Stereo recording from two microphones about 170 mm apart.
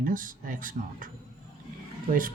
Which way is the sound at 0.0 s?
55° right (ahead or behind).